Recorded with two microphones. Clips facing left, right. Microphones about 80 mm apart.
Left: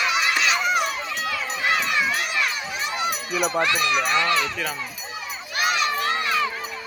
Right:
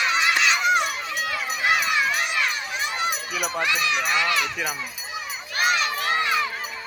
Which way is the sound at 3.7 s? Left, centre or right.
Left.